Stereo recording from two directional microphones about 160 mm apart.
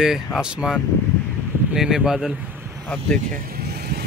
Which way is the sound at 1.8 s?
Centre (ahead or behind).